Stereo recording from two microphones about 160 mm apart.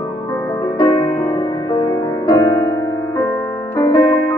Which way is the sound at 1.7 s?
25° left (ahead or behind).